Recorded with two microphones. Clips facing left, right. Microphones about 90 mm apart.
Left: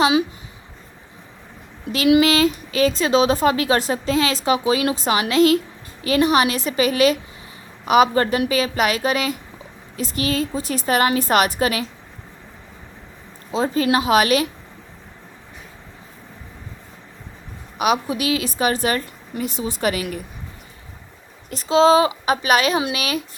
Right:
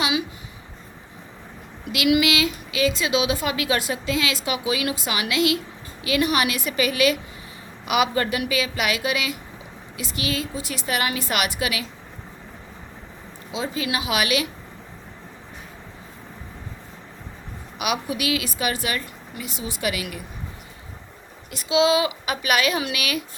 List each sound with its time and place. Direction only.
0.0 s a woman's voice: 35° left (ahead or behind)
1.9 s a woman's voice: 35° left (ahead or behind)
13.5 s a woman's voice: 40° left (ahead or behind)
17.7 s a woman's voice: 35° left (ahead or behind)
21.5 s a woman's voice: 35° left (ahead or behind)